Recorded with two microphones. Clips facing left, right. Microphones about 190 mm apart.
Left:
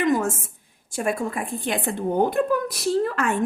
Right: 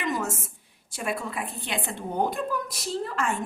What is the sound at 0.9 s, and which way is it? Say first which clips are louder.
Speech: left 6 dB; 50° left (ahead or behind).